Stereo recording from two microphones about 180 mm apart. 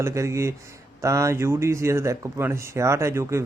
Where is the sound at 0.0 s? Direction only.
15° right (ahead or behind).